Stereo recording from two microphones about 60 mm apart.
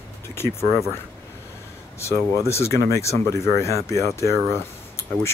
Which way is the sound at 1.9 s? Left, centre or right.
Left.